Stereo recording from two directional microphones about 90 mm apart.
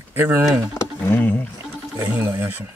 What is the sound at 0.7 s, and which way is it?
Speech, 25° left (ahead or behind).